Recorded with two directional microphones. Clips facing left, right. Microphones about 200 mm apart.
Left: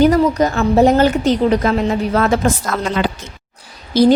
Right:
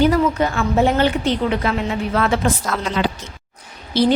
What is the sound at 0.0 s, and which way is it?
Speech, 40° left (ahead or behind).